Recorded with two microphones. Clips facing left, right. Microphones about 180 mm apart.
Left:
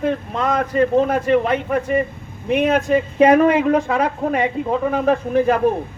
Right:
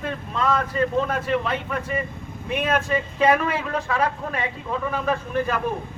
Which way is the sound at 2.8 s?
60° left (ahead or behind).